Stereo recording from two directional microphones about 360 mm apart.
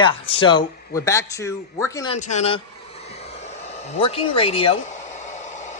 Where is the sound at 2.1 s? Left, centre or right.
Centre.